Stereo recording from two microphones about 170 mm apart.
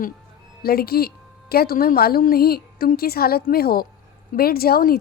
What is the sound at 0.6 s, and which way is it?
Speech, 65° left (ahead or behind).